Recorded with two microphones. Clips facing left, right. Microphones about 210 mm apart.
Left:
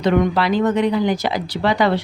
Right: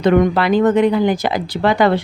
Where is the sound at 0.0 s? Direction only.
50° right (ahead or behind).